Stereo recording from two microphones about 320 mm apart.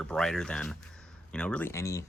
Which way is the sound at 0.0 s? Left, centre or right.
Centre.